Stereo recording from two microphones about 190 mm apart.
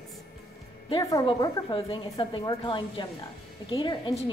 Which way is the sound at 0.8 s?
25° left (ahead or behind).